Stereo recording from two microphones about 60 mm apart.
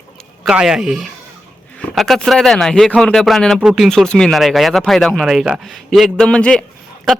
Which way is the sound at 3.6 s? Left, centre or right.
Centre.